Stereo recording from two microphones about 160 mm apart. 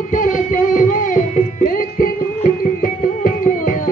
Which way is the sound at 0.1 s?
55° left (ahead or behind).